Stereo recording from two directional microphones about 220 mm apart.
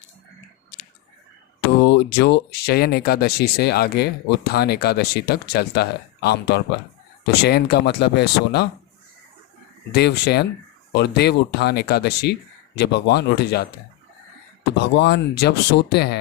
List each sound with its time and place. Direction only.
1.8 s speech: 50° left (ahead or behind)
9.9 s speech: 45° left (ahead or behind)
14.8 s speech: 50° left (ahead or behind)